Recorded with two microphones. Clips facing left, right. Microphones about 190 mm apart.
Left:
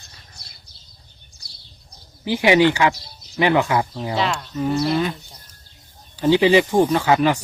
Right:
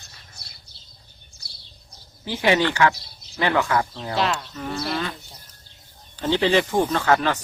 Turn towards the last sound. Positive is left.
turn(degrees=15)  # may be behind; listen again after turning